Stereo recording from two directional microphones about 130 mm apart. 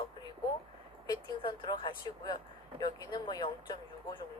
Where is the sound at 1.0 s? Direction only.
35° left (ahead or behind).